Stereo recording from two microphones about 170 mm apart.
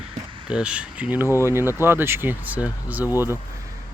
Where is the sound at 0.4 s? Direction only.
5° right (ahead or behind).